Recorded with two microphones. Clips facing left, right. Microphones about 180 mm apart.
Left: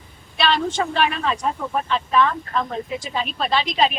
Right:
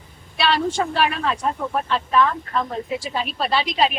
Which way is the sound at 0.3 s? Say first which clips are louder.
Even; 5° right (ahead or behind).